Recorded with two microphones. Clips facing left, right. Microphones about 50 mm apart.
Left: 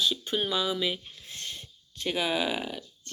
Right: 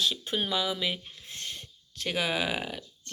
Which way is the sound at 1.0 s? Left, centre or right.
Right.